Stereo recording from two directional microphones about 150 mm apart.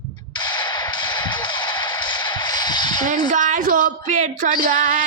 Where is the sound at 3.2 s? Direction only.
55° right (ahead or behind).